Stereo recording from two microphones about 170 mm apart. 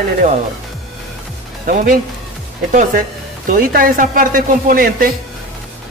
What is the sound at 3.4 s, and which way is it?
A man's voice, 55° right (ahead or behind).